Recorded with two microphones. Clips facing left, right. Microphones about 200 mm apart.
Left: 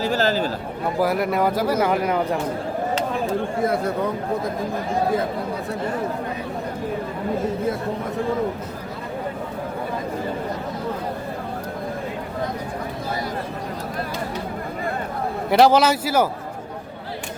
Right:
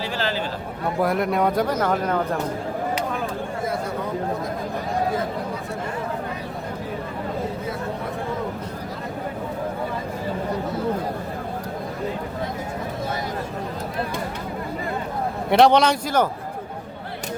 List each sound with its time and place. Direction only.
0.0 s a sound: 45° left (ahead or behind)
0.9 s speech: centre (ahead or behind)
15.4 s speech: centre (ahead or behind)